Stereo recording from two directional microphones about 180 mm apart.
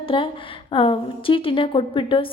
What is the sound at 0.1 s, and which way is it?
A woman's voice, 25° left (ahead or behind).